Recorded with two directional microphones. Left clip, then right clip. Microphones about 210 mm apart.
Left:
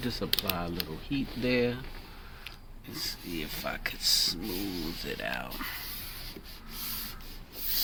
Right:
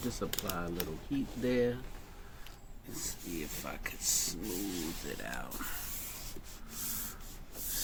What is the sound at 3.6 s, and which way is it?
Speech, 35° left (ahead or behind).